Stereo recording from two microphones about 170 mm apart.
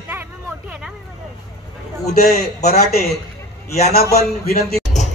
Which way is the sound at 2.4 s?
65° left (ahead or behind).